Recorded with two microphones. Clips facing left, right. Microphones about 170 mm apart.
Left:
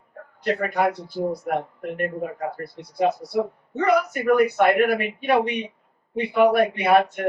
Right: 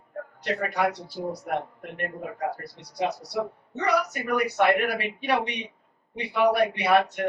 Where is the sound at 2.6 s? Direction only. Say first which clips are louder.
Left 6 dB; 50° left (ahead or behind).